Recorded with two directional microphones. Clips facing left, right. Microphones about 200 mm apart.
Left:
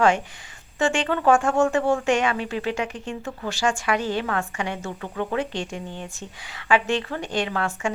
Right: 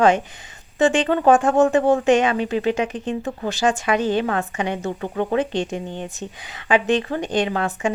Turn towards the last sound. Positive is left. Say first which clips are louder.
# right 4 dB
turn(degrees=-20)  # may be behind; listen again after turning